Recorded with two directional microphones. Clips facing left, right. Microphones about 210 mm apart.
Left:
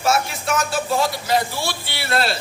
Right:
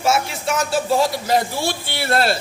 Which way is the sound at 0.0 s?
25° right (ahead or behind).